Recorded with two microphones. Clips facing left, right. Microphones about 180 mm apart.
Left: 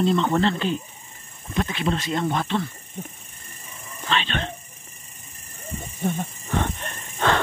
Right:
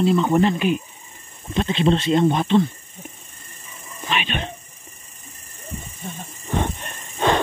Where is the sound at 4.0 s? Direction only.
15° right (ahead or behind).